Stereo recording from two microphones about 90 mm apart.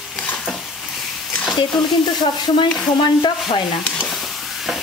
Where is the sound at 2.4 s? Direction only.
60° left (ahead or behind).